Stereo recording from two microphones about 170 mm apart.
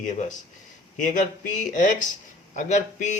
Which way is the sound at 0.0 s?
45° left (ahead or behind).